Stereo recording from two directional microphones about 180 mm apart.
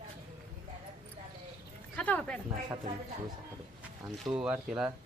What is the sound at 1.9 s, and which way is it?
Speech, 5° left (ahead or behind).